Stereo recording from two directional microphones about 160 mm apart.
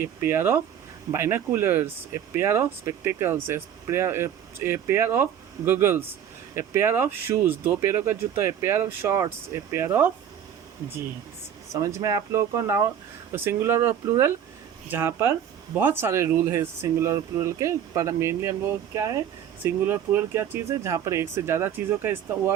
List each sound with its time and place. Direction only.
0.0 s speech: 15° right (ahead or behind)
11.7 s speech: 20° right (ahead or behind)